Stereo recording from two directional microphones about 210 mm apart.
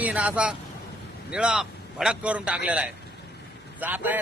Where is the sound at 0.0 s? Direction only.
5° right (ahead or behind).